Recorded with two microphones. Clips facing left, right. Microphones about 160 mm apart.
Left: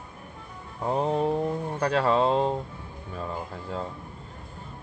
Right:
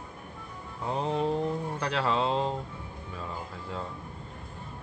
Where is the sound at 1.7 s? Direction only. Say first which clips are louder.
Left 7 dB; 45° left (ahead or behind).